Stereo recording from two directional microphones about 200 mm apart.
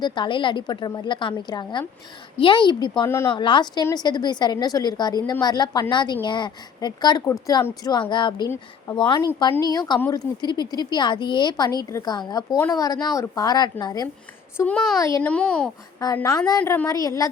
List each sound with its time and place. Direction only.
0.0 s speech: 25° left (ahead or behind)
3.1 s speech: 10° left (ahead or behind)
3.3 s speech: 25° left (ahead or behind)
14.5 s a child's voice: 5° left (ahead or behind)
14.9 s speech: 15° left (ahead or behind)
16.0 s speech: 15° left (ahead or behind)